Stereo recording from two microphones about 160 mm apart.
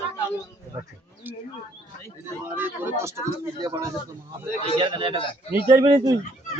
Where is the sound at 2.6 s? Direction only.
10° right (ahead or behind).